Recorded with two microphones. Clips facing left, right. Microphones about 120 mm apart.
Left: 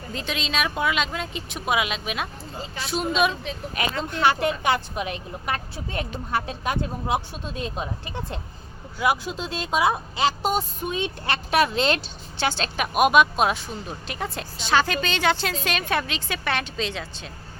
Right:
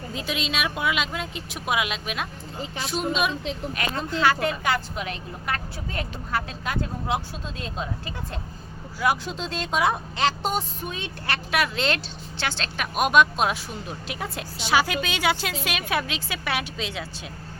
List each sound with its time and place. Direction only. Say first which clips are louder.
0.1 s speech: left 1 dB; 5° right (ahead or behind)
4.1 s a woman's voice: even; 20° left (ahead or behind); by 10.6 s 5° left (ahead or behind)
10.8 s a woman's voice: left 4 dB; 20° left (ahead or behind); by 17.1 s 5° right (ahead or behind)